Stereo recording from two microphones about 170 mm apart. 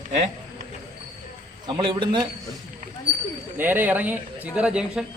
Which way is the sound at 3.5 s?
10° right (ahead or behind).